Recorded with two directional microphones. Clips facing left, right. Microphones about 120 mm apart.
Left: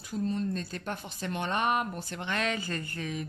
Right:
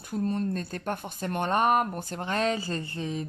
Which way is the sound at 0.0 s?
55° right (ahead or behind).